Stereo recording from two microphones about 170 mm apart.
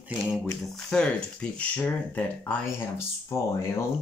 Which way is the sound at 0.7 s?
5° left (ahead or behind).